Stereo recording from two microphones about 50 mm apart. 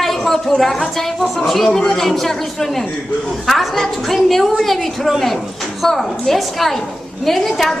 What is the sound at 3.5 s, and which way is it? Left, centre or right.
A woman's voice, centre.